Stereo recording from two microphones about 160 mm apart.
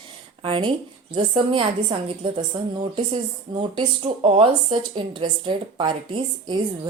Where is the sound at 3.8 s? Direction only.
35° right (ahead or behind).